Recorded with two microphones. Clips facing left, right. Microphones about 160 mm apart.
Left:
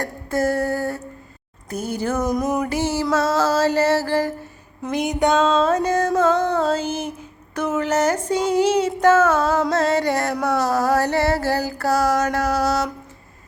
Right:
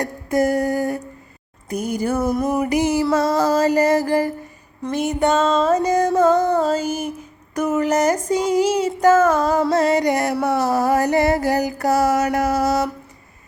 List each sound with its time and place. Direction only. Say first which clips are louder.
0.0 s a sound: right 3 dB; 15° right (ahead or behind)
1.7 s music: right 2 dB; 10° right (ahead or behind)
4.8 s music: right 1 dB; centre (ahead or behind)
7.5 s child singing: right 2 dB; 10° right (ahead or behind)
9.9 s music: right 2 dB; 15° right (ahead or behind)
10.4 s a sound: even; centre (ahead or behind)
10.8 s music: right 2 dB; 15° right (ahead or behind)